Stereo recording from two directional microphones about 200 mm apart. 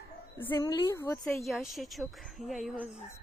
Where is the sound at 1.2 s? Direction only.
Centre (ahead or behind).